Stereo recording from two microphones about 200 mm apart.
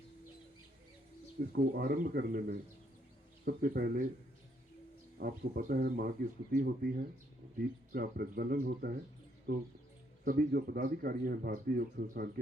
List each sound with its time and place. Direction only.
1.4 s speech: 45° right (ahead or behind)
5.1 s speech: 50° right (ahead or behind)
10.2 s speech: 50° right (ahead or behind)